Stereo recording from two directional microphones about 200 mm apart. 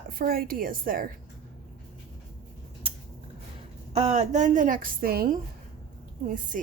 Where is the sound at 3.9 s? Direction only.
35° right (ahead or behind).